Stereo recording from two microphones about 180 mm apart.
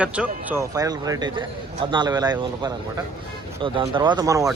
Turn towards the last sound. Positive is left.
turn(degrees=-20)  # may be behind; listen again after turning